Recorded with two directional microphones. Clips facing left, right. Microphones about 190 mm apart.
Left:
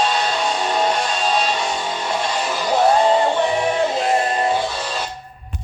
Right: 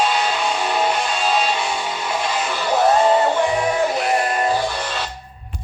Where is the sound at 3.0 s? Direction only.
5° right (ahead or behind).